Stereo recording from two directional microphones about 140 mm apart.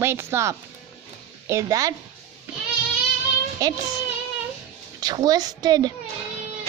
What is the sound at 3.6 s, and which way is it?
Speech, 25° right (ahead or behind).